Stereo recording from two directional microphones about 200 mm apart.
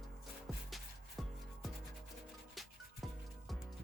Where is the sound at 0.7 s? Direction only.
Centre (ahead or behind).